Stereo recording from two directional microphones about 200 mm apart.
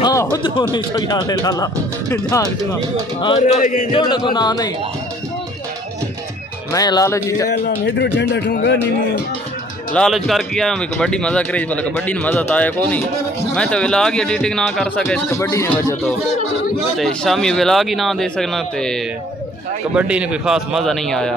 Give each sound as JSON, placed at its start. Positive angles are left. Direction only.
{"t": 0.0, "sound": "speech", "side_deg": 15}
{"t": 3.6, "sound": "a sound", "side_deg": 45}
{"t": 3.9, "sound": "speech", "side_deg": 20}
{"t": 6.7, "sound": "speech", "side_deg": 20}
{"t": 7.4, "sound": "speech", "side_deg": 55}
{"t": 9.9, "sound": "a man's voice", "side_deg": 0}
{"t": 15.2, "sound": "speech", "side_deg": 15}
{"t": 16.9, "sound": "a man's voice", "side_deg": 0}
{"t": 20.0, "sound": "a man's voice", "side_deg": -5}